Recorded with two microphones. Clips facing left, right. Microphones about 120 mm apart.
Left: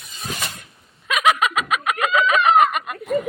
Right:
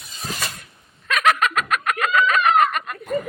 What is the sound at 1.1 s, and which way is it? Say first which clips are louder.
Snicker: left 1 dB; 5° left (ahead or behind).